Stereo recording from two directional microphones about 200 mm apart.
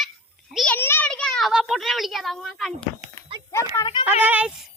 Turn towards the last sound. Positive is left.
turn(degrees=-10)  # may be behind; listen again after turning